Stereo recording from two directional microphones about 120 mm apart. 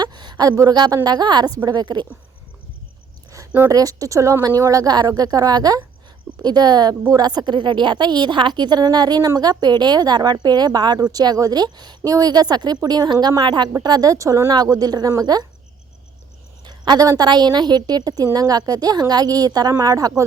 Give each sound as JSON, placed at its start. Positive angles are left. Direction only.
{"t": 0.0, "sound": "a sound", "side_deg": -40}
{"t": 1.0, "sound": "a woman's voice", "side_deg": -35}
{"t": 3.3, "sound": "a woman's voice", "side_deg": -25}
{"t": 16.6, "sound": "a woman's voice", "side_deg": -35}